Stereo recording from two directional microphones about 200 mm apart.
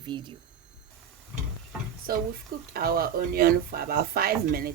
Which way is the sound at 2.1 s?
50° right (ahead or behind).